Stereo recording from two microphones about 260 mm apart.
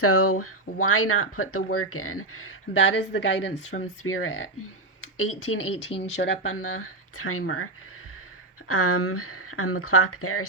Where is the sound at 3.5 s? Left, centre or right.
Left.